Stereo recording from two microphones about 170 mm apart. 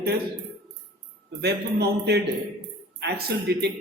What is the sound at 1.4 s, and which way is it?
Music, 75° right (ahead or behind).